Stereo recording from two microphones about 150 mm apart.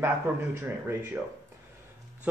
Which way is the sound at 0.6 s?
15° right (ahead or behind).